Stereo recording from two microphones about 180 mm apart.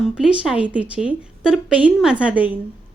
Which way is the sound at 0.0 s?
Centre (ahead or behind).